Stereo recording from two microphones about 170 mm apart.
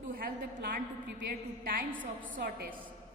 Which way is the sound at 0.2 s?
55° right (ahead or behind).